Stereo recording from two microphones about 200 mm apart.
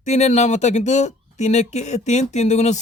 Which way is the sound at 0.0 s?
35° left (ahead or behind).